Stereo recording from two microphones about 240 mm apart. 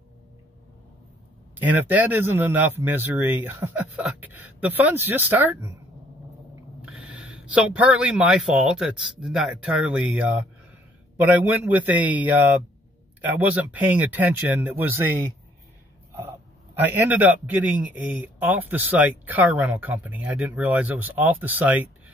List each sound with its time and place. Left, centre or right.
1.6 s a man's voice: centre
6.8 s a man's voice: centre
16.7 s a man's voice: centre